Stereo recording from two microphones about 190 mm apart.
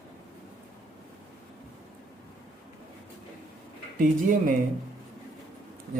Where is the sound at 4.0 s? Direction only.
45° right (ahead or behind).